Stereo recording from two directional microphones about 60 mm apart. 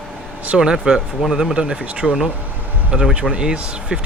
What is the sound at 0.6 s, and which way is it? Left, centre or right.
Speech, centre.